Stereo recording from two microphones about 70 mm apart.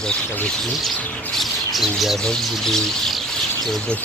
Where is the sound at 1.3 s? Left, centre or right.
Centre.